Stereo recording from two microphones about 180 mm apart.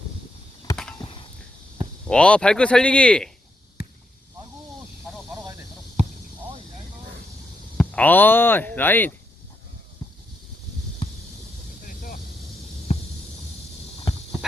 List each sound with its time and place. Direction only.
2.0 s speech: 5° left (ahead or behind)
5.1 s snake: centre (ahead or behind)
7.8 s speech: 10° left (ahead or behind)
10.0 s a sound: 20° left (ahead or behind)
11.9 s vehicle: 50° left (ahead or behind)
12.9 s a sound: 35° left (ahead or behind)